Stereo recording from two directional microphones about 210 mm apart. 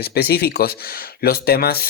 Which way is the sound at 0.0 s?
50° left (ahead or behind).